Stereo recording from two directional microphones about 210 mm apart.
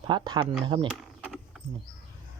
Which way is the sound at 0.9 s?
5° right (ahead or behind).